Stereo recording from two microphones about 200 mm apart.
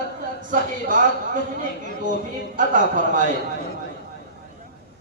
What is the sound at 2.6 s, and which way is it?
Speech, 40° right (ahead or behind).